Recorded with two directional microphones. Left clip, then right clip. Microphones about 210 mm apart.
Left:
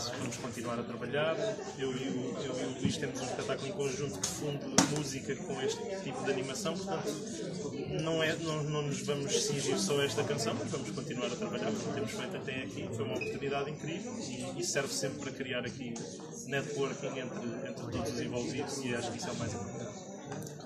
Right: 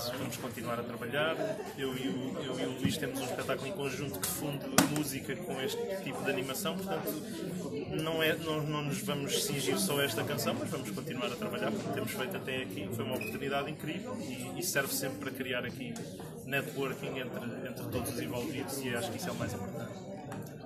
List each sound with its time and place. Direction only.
0.7 s a man's voice: 10° right (ahead or behind)
4.8 s speech: 25° right (ahead or behind)
8.0 s a man's voice: 10° right (ahead or behind)
14.6 s a man's voice: 15° right (ahead or behind)